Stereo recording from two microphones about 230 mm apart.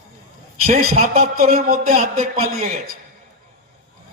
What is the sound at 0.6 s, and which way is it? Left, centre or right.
A man's voice, right.